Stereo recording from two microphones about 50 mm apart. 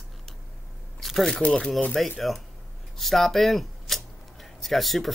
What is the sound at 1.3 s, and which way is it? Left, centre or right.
Speech, centre.